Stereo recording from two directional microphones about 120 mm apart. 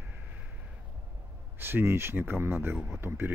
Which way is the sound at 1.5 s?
20° right (ahead or behind).